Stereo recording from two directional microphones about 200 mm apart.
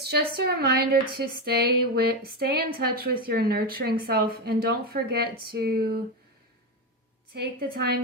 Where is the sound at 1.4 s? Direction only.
50° right (ahead or behind).